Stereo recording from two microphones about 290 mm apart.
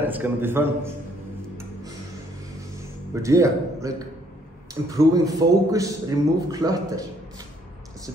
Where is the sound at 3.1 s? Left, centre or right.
Centre.